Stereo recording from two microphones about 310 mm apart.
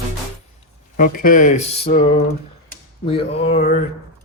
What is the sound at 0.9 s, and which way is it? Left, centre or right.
Mantra, left.